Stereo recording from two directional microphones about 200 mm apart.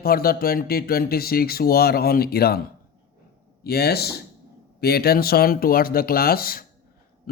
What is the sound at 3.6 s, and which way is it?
Speech, 50° left (ahead or behind).